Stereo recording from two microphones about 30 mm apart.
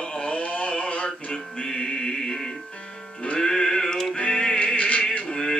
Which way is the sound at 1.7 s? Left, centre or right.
Left.